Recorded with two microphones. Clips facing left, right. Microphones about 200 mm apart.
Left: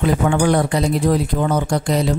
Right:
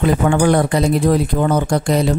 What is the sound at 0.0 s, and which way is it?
Speech, 55° right (ahead or behind).